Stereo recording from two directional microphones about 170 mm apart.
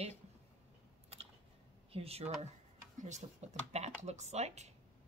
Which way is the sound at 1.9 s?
35° right (ahead or behind).